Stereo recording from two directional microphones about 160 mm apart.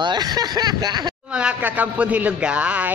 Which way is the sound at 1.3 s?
10° right (ahead or behind).